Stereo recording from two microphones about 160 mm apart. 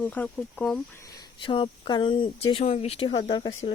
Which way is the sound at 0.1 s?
10° left (ahead or behind).